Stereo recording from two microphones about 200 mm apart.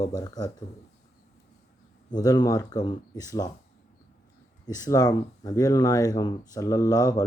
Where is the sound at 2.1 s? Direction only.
20° left (ahead or behind).